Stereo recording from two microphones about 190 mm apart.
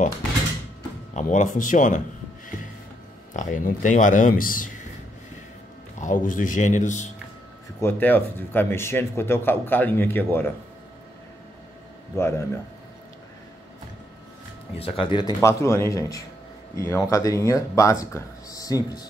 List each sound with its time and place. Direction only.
1.1 s speech: 40° left (ahead or behind)
3.3 s speech: 40° left (ahead or behind)
5.9 s speech: 45° left (ahead or behind)
7.8 s speech: 10° left (ahead or behind)
12.2 s speech: 15° left (ahead or behind)
14.8 s speech: 30° left (ahead or behind)